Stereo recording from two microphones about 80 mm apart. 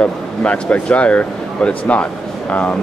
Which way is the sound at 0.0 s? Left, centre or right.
Centre.